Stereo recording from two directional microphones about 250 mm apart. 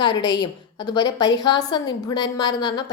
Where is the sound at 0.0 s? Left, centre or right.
Centre.